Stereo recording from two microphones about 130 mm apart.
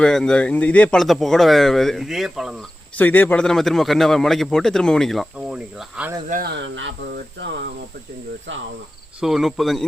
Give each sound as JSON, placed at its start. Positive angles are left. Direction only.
{"t": 0.0, "sound": "a man's voice", "side_deg": 5}
{"t": 3.0, "sound": "a man's voice", "side_deg": 15}
{"t": 6.3, "sound": "speech", "side_deg": -75}
{"t": 9.2, "sound": "a man's voice", "side_deg": 0}